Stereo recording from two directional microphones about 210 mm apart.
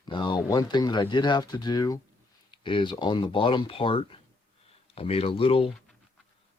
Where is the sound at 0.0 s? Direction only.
20° left (ahead or behind).